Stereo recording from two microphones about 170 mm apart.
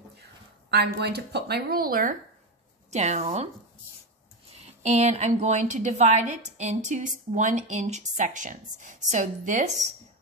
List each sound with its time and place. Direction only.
0.2 s speech: 75° right (ahead or behind); by 2.1 s 60° right (ahead or behind)
2.9 s a woman's voice: 40° right (ahead or behind)
4.6 s a woman's voice: 40° right (ahead or behind)